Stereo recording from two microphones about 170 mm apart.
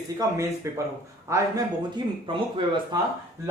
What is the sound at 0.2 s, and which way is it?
Speech, 20° right (ahead or behind).